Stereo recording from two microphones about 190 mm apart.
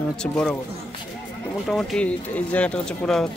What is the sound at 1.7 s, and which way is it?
Speech, centre (ahead or behind).